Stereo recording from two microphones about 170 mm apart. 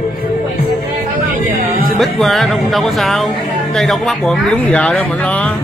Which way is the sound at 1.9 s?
Centre (ahead or behind).